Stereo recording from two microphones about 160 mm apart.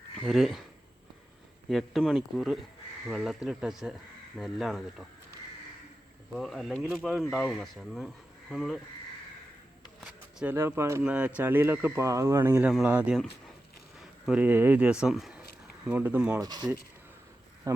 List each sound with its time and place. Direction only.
0.3 s speech: centre (ahead or behind)
1.7 s speech: centre (ahead or behind)
6.3 s speech: centre (ahead or behind)
10.0 s a sound: 10° right (ahead or behind)
11.0 s speech: 10° right (ahead or behind)
16.4 s speech: 25° right (ahead or behind)
17.7 s speech: 20° right (ahead or behind)